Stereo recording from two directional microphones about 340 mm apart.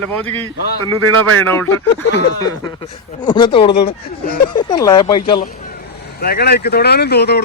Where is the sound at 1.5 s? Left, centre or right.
Centre.